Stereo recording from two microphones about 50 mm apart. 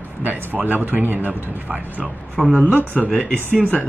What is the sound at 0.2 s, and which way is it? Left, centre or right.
Speech, right.